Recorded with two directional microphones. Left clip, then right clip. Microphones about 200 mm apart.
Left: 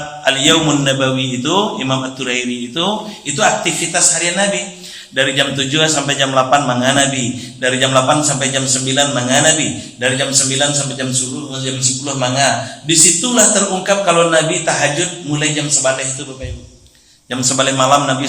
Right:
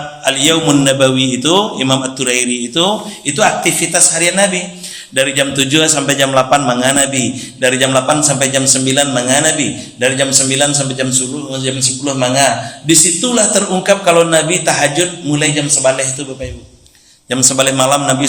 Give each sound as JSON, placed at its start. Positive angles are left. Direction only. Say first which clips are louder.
{"t": 0.3, "sound": "a man's voice", "louder": "even", "side_deg": -45}
{"t": 17.2, "sound": "a man's voice", "louder": "right 3 dB", "side_deg": -45}